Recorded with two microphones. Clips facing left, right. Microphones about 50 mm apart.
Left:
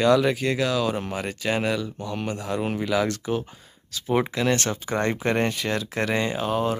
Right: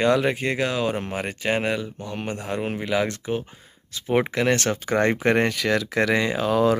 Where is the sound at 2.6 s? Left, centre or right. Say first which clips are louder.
Even; right.